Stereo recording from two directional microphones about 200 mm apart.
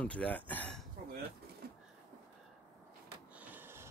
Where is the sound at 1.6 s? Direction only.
50° right (ahead or behind).